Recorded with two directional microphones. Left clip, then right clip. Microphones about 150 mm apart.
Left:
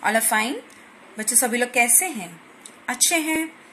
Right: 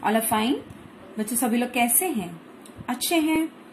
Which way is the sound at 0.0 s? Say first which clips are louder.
Left 2 dB; 15° left (ahead or behind).